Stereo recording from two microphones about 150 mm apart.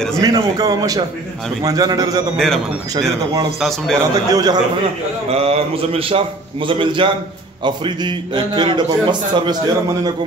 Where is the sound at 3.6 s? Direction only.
Centre (ahead or behind).